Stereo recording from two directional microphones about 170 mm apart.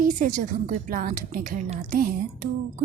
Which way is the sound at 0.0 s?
50° right (ahead or behind).